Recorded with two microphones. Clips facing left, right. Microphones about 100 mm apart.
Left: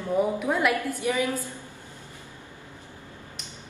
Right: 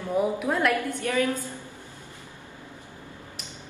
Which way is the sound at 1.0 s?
15° left (ahead or behind).